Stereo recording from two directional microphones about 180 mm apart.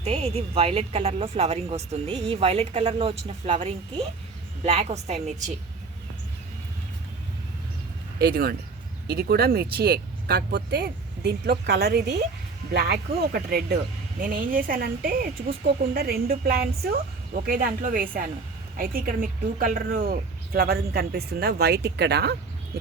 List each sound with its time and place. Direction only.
0.0 s speech: 35° right (ahead or behind)
8.2 s speech: 60° right (ahead or behind)